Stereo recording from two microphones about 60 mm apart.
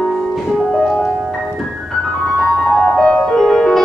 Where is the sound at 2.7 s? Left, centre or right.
Left; by 3.8 s centre.